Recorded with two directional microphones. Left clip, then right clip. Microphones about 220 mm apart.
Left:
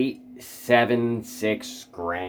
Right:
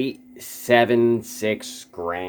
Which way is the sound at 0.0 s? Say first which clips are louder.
Even; 40° right (ahead or behind).